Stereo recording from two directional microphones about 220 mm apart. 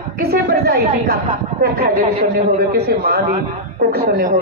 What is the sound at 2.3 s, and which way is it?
A man's voice, 45° right (ahead or behind).